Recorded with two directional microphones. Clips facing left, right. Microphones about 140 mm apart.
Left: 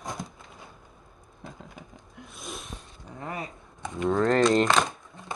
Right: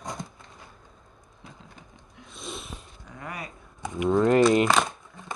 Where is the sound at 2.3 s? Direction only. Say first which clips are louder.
Right 2 dB; centre (ahead or behind).